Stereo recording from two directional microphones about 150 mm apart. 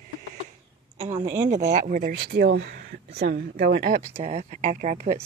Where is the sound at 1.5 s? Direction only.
50° right (ahead or behind).